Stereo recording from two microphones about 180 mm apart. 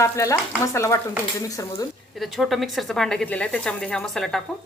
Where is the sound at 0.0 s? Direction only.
15° left (ahead or behind).